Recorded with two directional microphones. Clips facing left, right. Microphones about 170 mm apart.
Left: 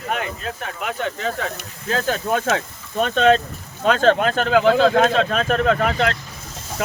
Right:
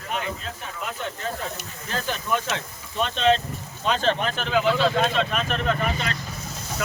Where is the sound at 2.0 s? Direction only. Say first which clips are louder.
Left 5 dB; 50° left (ahead or behind).